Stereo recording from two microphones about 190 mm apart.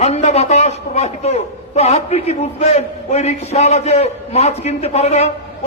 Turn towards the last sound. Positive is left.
turn(degrees=35)  # may be behind; listen again after turning